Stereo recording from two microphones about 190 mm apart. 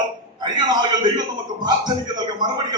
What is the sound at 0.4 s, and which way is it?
A man's voice, 20° right (ahead or behind).